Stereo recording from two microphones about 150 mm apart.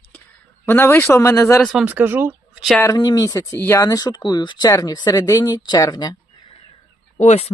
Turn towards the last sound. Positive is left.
turn(degrees=45)  # may be behind; listen again after turning